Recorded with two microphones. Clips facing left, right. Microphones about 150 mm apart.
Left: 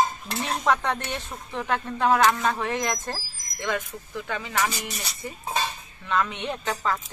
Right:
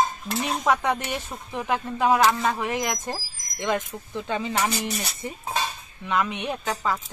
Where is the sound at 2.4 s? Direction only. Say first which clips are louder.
Even; 10° right (ahead or behind).